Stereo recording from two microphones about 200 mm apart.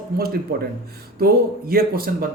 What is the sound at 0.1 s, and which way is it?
Speech, 50° right (ahead or behind).